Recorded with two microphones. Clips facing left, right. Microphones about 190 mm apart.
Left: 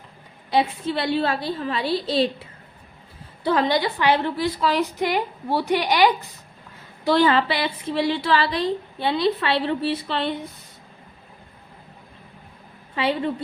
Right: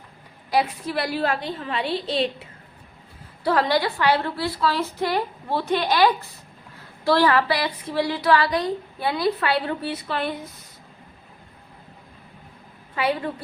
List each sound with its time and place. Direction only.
0.5 s a woman's voice: 25° left (ahead or behind)
3.4 s a woman's voice: 20° left (ahead or behind)
13.0 s a woman's voice: 25° left (ahead or behind)